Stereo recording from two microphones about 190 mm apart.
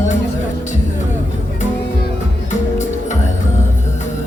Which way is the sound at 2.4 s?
40° left (ahead or behind).